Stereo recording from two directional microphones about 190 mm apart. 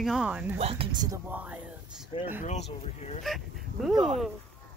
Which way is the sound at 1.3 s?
5° right (ahead or behind).